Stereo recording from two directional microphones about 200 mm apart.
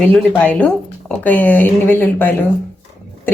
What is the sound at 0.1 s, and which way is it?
Speech, 5° left (ahead or behind).